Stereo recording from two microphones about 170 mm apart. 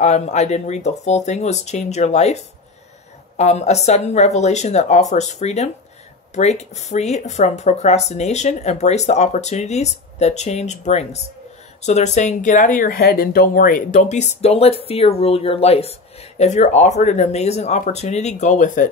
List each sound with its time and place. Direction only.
0.0 s speech: 40° left (ahead or behind)